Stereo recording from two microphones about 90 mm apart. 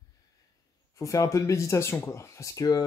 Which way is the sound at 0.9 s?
35° left (ahead or behind).